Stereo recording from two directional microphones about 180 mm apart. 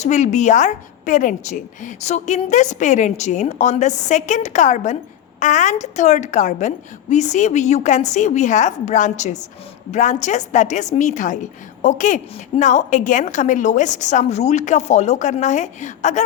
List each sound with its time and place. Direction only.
0.0 s a woman's voice: 40° left (ahead or behind)